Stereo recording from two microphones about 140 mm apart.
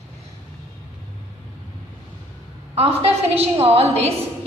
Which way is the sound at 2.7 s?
45° right (ahead or behind).